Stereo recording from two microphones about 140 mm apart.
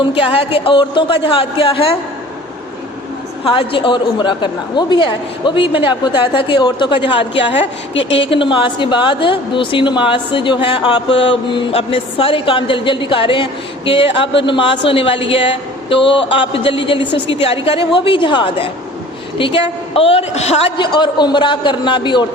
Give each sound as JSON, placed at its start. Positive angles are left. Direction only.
{"t": 0.1, "sound": "a woman's voice", "side_deg": 40}
{"t": 3.4, "sound": "a woman's voice", "side_deg": 40}